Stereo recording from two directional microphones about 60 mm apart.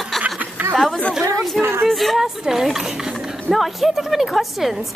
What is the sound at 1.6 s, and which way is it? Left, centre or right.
Speech, right.